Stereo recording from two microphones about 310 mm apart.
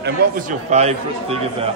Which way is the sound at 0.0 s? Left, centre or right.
Right.